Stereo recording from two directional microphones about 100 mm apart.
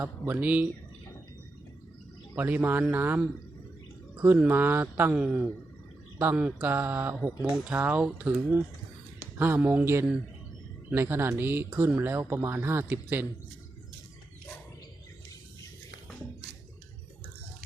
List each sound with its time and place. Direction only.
0.0 s speech: 20° right (ahead or behind)
2.3 s speech: 20° right (ahead or behind)